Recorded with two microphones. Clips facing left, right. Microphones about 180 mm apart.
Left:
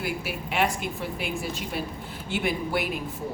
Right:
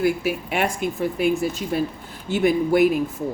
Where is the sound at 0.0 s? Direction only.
50° right (ahead or behind).